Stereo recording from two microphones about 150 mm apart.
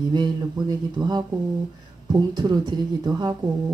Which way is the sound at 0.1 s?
30° right (ahead or behind).